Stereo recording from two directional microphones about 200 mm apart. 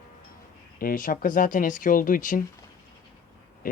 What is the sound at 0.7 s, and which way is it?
Speech, 45° left (ahead or behind).